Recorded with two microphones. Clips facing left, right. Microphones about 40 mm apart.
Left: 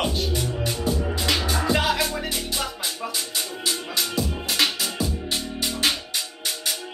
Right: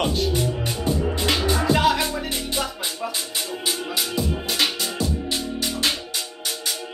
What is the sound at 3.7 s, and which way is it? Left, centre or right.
Music, centre.